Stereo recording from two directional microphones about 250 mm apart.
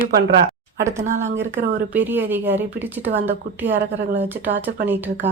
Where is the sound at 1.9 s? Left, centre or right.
Centre.